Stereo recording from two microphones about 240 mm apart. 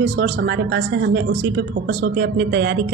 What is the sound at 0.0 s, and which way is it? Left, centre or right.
A woman's voice, right.